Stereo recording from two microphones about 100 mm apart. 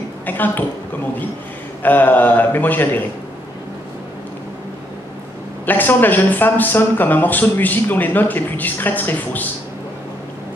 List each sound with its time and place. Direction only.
0.3 s a woman's voice: 20° left (ahead or behind)
1.8 s speech: 20° left (ahead or behind)
5.7 s speech: 20° left (ahead or behind)